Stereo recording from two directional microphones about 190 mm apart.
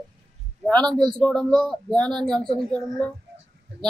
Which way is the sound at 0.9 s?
5° left (ahead or behind).